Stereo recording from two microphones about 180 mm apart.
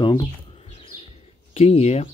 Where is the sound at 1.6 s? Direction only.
35° left (ahead or behind).